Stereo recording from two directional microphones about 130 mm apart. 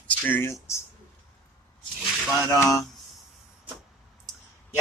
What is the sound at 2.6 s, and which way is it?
Speech, 25° left (ahead or behind).